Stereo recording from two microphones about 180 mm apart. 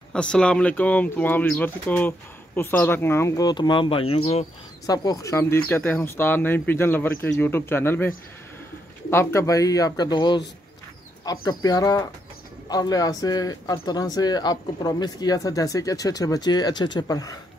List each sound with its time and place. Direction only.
0.1 s speech: 5° left (ahead or behind); by 4.5 s 35° left (ahead or behind)
4.8 s speech: 20° left (ahead or behind)
9.1 s speech: 15° left (ahead or behind)
11.4 s speech: 20° left (ahead or behind)